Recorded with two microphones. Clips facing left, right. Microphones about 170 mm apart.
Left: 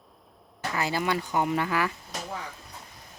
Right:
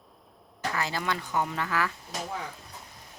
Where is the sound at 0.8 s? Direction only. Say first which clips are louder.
Left 5 dB; 10° left (ahead or behind).